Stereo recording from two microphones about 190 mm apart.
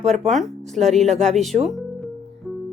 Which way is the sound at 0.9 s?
35° right (ahead or behind).